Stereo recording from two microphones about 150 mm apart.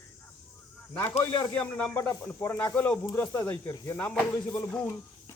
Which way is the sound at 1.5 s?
10° left (ahead or behind).